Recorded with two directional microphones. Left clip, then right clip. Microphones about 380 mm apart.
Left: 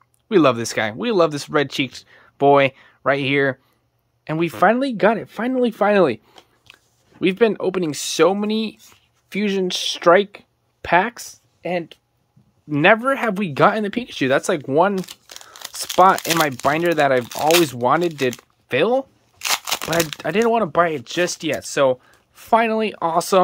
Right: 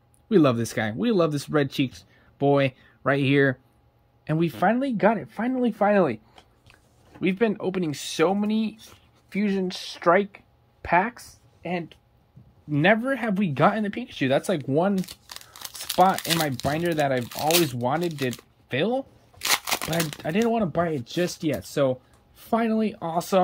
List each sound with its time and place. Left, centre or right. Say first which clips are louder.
0.3 s speech: left 5 dB; centre
16.3 s speech: left 8 dB; centre
18.0 s a sound: left 7 dB; centre
20.2 s speech: left 6 dB; centre